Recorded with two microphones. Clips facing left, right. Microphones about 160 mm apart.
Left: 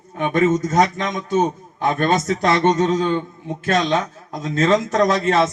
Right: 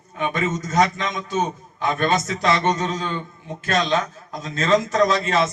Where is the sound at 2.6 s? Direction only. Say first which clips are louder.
Left 6 dB; 20° left (ahead or behind).